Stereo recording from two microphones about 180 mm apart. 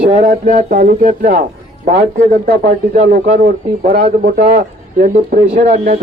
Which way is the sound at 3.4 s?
60° right (ahead or behind).